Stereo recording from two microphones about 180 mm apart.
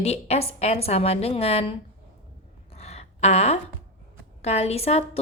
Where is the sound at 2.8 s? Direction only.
35° left (ahead or behind).